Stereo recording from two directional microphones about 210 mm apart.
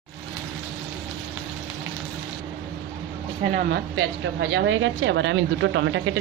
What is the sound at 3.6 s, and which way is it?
Speech, 50° right (ahead or behind).